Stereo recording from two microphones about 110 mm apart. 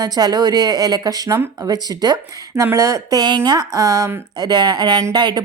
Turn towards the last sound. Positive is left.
turn(degrees=-40)  # may be behind; listen again after turning